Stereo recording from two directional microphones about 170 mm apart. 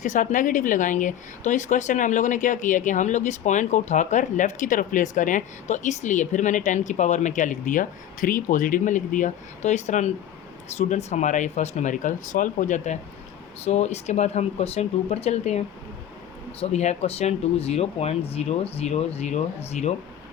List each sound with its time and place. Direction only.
0.0 s speech: 50° left (ahead or behind)